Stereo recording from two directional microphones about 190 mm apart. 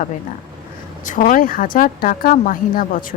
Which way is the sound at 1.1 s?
45° left (ahead or behind).